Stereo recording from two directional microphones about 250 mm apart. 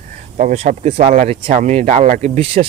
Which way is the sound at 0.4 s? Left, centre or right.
Right.